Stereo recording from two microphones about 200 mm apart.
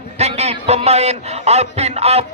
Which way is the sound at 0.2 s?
35° right (ahead or behind).